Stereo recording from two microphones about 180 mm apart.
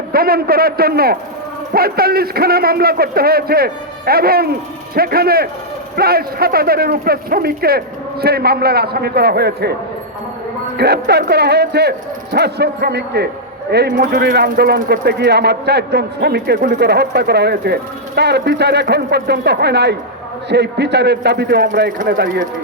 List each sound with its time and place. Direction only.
0.1 s a man's voice: 55° right (ahead or behind)
10.8 s a man's voice: 65° right (ahead or behind)
21.9 s a man's voice: 55° right (ahead or behind)